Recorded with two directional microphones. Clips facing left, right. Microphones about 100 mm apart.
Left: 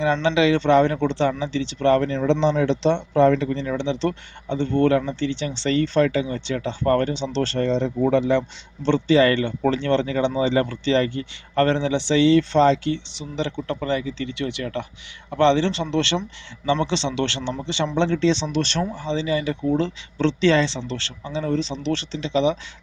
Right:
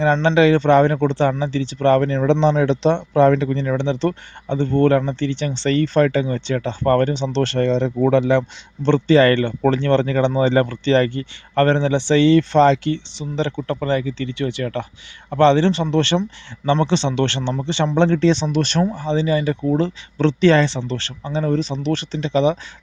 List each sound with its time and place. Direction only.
0.0 s speech: 45° right (ahead or behind); by 13.0 s 60° right (ahead or behind)
13.4 s speech: 50° right (ahead or behind)